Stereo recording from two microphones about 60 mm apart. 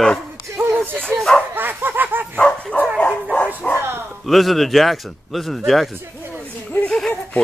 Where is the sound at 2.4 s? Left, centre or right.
Centre.